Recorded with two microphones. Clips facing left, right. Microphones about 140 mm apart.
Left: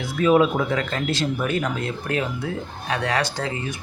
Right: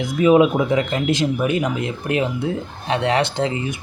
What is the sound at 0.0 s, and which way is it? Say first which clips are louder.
Speech: right 4 dB; 15° right (ahead or behind).